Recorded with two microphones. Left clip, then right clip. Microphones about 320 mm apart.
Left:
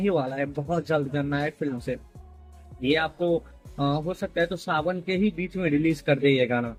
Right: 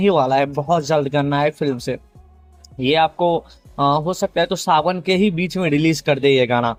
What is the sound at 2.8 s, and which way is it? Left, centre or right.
Speech, centre.